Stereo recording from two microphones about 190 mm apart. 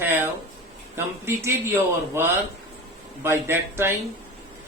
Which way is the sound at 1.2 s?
15° right (ahead or behind).